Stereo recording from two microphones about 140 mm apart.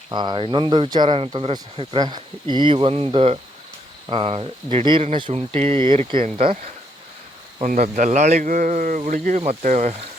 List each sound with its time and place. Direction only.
0.1 s speech: 30° right (ahead or behind)
7.6 s speech: 65° right (ahead or behind)